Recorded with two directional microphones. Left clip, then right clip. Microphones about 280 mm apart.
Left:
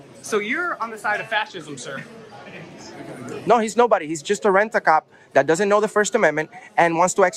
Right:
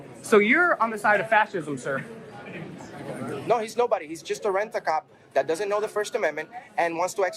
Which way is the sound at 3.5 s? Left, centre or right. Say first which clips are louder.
Left 7 dB; left.